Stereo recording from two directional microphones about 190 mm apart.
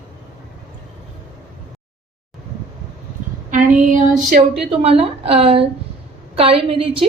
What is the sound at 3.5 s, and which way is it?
Female singing, 45° right (ahead or behind).